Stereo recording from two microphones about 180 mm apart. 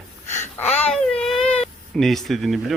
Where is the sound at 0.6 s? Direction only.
35° left (ahead or behind).